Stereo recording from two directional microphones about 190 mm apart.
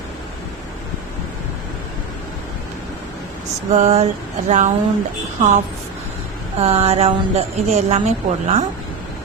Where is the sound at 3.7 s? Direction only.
35° right (ahead or behind).